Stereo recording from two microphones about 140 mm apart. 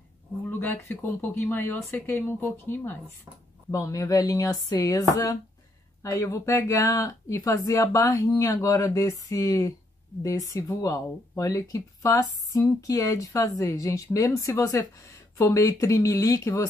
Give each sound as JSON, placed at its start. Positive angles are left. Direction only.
{"t": 0.5, "sound": "speech", "side_deg": 15}